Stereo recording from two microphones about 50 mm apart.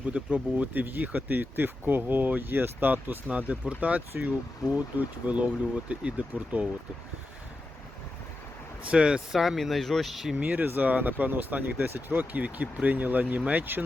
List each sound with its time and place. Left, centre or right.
0.0 s speech: right
3.2 s speech: right
8.9 s speech: centre
9.3 s speech: centre
10.3 s speech: right